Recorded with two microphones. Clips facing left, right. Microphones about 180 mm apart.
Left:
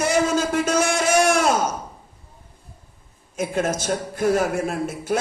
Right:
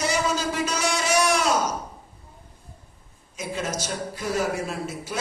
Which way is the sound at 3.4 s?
50° left (ahead or behind).